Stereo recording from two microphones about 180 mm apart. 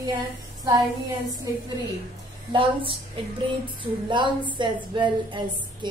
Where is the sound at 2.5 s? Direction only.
30° right (ahead or behind).